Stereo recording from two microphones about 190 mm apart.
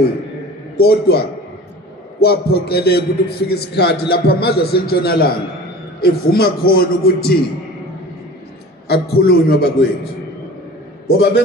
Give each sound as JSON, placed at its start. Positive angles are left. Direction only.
{"t": 0.7, "sound": "a man's voice", "side_deg": 55}
{"t": 8.8, "sound": "a man's voice", "side_deg": 55}
{"t": 11.1, "sound": "a man's voice", "side_deg": 55}